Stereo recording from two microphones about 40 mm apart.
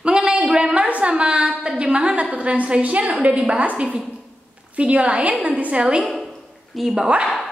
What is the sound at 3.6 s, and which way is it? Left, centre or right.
A woman's voice, right.